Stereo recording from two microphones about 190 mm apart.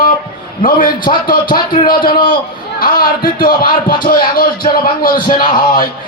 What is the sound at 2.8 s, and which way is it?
A man's voice, 50° left (ahead or behind).